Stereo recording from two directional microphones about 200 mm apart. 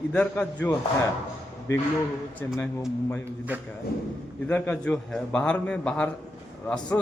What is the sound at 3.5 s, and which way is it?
Speech, 10° right (ahead or behind).